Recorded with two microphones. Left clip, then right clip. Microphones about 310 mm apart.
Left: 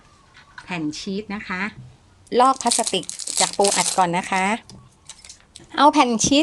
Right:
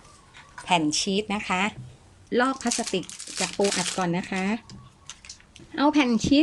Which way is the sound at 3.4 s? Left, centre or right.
Left.